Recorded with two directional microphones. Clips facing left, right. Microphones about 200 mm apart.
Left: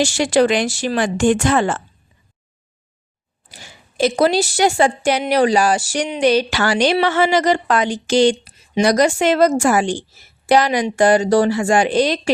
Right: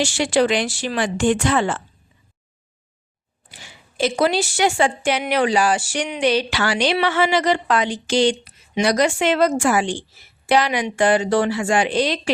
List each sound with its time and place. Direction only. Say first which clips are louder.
0.0 s speech: left 3 dB; 40° left (ahead or behind)
3.5 s a woman's voice: left 2 dB; 40° left (ahead or behind)